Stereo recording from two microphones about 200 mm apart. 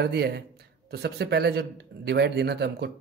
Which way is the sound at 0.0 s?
55° right (ahead or behind).